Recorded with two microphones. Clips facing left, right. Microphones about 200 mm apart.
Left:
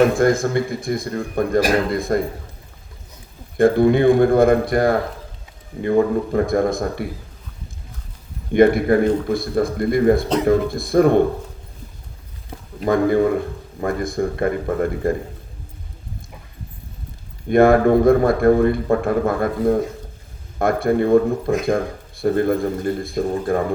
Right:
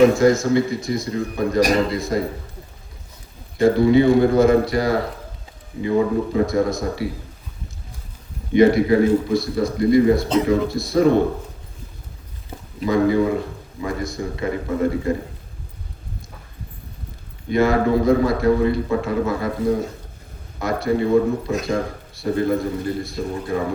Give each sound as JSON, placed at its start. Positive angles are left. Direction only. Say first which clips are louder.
{"t": 0.0, "sound": "a man's voice", "louder": "right 1 dB", "side_deg": 55}
{"t": 3.6, "sound": "a man's voice", "louder": "even", "side_deg": 55}
{"t": 6.3, "sound": "a man's voice", "louder": "left 3 dB", "side_deg": 55}
{"t": 8.5, "sound": "a man's voice", "louder": "even", "side_deg": 55}
{"t": 12.8, "sound": "a man's voice", "louder": "left 1 dB", "side_deg": 55}
{"t": 17.5, "sound": "a man's voice", "louder": "left 5 dB", "side_deg": 55}